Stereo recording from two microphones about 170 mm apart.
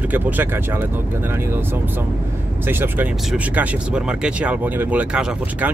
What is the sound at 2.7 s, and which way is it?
Speech, 10° right (ahead or behind).